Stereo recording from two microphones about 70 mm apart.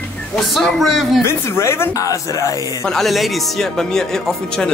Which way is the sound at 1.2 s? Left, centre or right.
Left.